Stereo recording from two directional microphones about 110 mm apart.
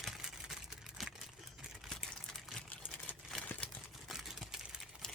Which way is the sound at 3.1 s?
15° left (ahead or behind).